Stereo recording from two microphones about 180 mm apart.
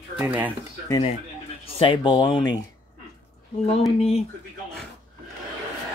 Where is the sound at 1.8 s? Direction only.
25° left (ahead or behind).